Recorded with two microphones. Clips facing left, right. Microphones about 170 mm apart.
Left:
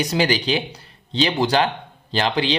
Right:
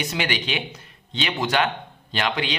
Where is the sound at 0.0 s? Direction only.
35° left (ahead or behind).